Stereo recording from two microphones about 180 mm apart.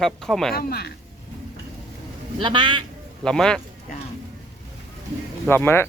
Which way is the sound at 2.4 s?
25° right (ahead or behind).